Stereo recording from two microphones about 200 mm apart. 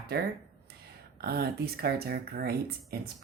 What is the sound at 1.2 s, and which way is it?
Speech, 50° right (ahead or behind).